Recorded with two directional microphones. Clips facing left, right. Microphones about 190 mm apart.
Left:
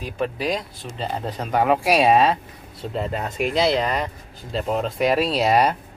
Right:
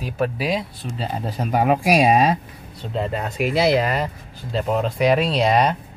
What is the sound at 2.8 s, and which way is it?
Speech, centre (ahead or behind).